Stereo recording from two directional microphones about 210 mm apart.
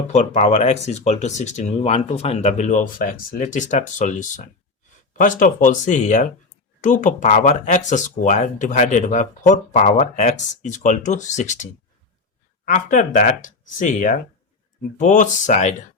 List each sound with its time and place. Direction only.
0.1 s speech: 35° left (ahead or behind)